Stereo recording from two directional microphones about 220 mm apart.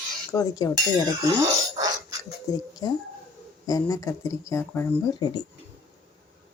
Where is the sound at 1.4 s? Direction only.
15° right (ahead or behind).